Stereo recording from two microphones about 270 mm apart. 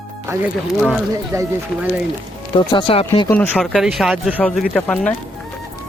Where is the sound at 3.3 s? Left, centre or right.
Centre.